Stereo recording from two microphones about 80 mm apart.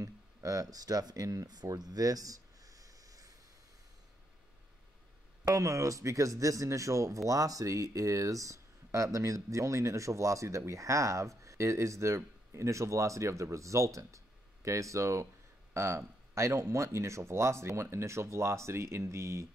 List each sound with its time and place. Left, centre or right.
0.0 s speech: right
5.5 s speech: right